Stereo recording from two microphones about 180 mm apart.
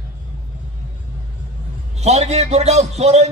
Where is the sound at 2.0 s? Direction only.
35° right (ahead or behind).